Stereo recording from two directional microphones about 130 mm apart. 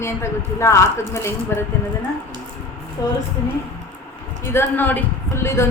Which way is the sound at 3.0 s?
25° left (ahead or behind).